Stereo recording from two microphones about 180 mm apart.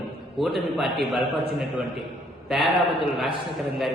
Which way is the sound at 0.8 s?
Centre (ahead or behind).